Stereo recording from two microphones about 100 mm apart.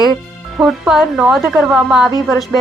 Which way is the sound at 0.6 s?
5° right (ahead or behind).